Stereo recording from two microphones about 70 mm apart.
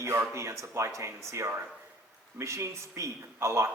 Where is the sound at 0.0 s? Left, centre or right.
Right.